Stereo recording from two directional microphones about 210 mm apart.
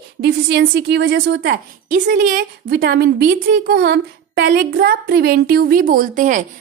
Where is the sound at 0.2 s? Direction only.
55° right (ahead or behind).